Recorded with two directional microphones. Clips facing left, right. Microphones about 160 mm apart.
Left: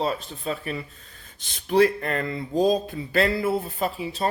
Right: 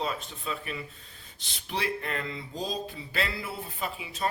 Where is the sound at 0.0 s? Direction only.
40° left (ahead or behind).